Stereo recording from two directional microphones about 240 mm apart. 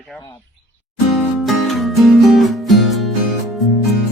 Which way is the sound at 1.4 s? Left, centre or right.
Centre.